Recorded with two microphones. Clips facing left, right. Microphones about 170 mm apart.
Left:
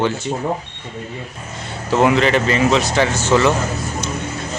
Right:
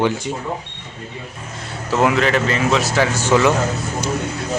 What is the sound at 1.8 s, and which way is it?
A man's voice, centre (ahead or behind).